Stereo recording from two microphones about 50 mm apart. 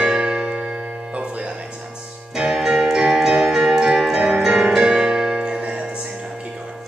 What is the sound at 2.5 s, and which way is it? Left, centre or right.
Music, centre.